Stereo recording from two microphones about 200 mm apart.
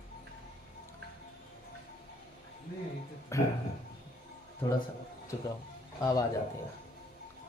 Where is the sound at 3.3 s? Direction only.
15° left (ahead or behind).